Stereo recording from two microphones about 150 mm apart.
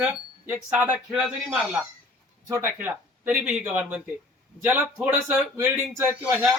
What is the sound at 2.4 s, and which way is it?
Speech, 20° right (ahead or behind).